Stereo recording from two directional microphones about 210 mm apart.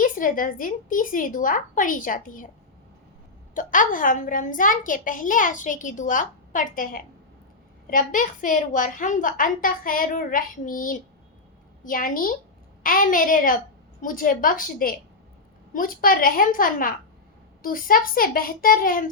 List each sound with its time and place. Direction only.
0.0 s a woman's voice: 40° left (ahead or behind)
3.5 s a woman's voice: 40° left (ahead or behind)